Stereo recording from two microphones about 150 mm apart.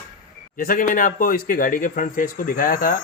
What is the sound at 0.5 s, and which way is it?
Speech, 65° left (ahead or behind).